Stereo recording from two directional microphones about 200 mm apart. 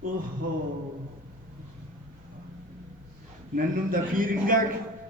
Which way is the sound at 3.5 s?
45° right (ahead or behind).